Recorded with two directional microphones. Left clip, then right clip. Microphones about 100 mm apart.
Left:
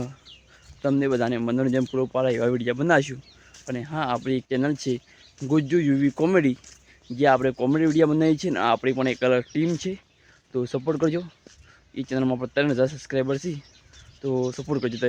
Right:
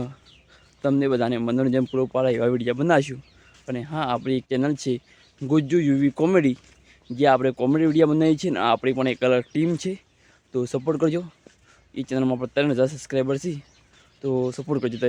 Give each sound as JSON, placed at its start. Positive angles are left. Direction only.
{"t": 0.8, "sound": "speech", "side_deg": -35}